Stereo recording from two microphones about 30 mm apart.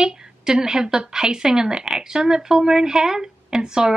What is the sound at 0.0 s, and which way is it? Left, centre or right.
A woman's voice, right.